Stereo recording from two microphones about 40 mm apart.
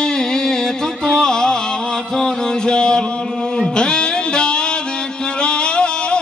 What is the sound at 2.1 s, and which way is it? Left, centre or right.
Mantra, centre.